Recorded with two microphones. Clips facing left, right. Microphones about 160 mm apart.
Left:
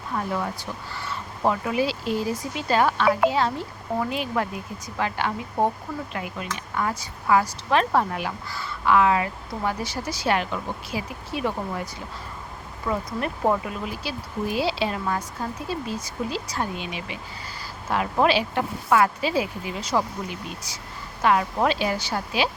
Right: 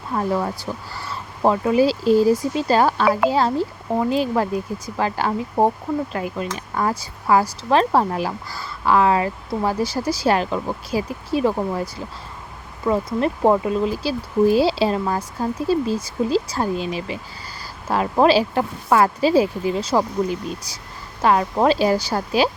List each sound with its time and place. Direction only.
0.1 s speech: 35° right (ahead or behind)
12.8 s speech: 30° right (ahead or behind)